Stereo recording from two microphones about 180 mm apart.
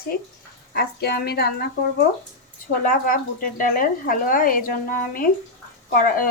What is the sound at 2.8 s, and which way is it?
A woman's voice, 50° left (ahead or behind).